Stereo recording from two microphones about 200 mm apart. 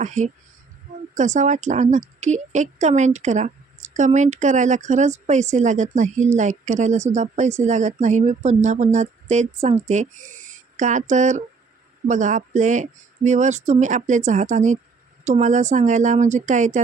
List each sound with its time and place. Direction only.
0.0 s a woman's voice: 40° right (ahead or behind)